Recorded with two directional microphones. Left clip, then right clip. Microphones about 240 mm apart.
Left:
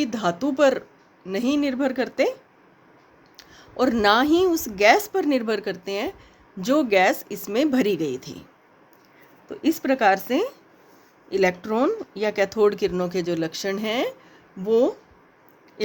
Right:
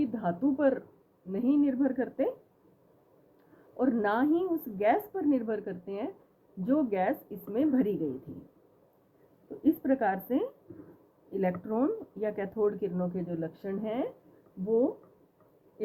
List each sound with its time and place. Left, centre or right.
0.0 s speech: left
3.8 s speech: left
9.6 s speech: left